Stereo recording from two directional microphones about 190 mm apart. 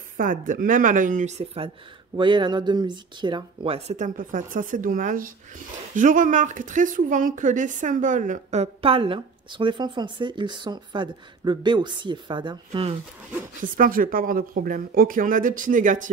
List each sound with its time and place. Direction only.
0.2 s speech: 45° right (ahead or behind); by 12.9 s 25° right (ahead or behind)
13.6 s speech: 45° right (ahead or behind)